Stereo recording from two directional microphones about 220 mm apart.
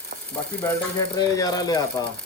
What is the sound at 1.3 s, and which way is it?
Speech, 15° left (ahead or behind).